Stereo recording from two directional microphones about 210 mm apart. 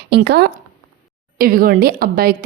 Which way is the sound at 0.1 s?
50° right (ahead or behind).